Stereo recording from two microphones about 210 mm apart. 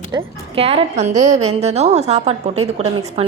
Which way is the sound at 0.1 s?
25° right (ahead or behind).